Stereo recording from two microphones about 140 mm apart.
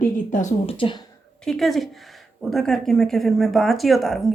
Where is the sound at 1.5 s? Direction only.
Centre (ahead or behind).